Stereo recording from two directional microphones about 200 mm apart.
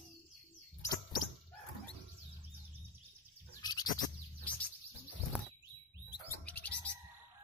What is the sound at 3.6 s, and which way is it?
Bird, 20° left (ahead or behind).